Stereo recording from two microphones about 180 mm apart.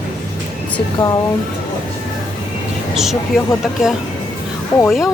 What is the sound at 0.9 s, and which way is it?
Speech, 20° left (ahead or behind).